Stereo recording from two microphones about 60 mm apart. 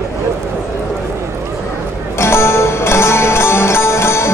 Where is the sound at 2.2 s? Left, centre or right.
Left.